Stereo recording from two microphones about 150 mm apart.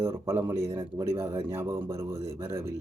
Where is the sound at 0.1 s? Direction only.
15° right (ahead or behind).